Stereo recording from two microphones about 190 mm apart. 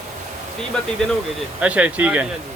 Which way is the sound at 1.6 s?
5° right (ahead or behind).